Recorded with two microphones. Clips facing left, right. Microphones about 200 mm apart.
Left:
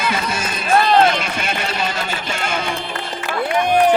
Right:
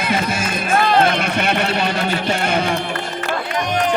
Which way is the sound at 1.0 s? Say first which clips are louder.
Even; 60° right (ahead or behind).